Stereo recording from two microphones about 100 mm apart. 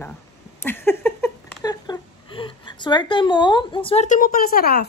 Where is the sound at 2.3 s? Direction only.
55° left (ahead or behind).